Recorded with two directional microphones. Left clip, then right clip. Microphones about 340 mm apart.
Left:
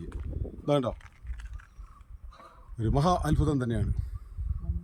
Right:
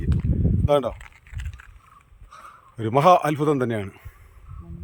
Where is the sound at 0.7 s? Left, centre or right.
Centre.